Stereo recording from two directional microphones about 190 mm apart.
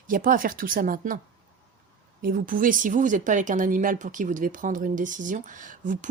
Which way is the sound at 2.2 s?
45° right (ahead or behind).